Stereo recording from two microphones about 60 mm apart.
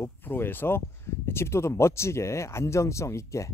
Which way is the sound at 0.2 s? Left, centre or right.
Left.